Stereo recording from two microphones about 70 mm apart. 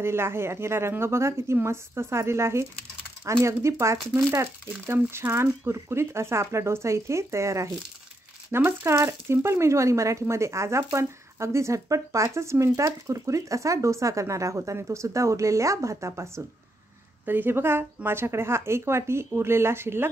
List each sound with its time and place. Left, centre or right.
0.0 s speech: right
17.3 s speech: right